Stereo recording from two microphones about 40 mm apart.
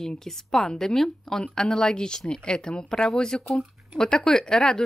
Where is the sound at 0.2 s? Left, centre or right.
Centre.